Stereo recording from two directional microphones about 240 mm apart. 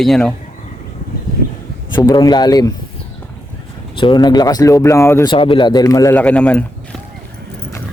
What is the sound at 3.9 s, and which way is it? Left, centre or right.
Speech, centre.